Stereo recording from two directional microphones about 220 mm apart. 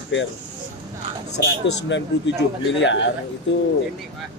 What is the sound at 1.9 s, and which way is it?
Speech, 55° left (ahead or behind).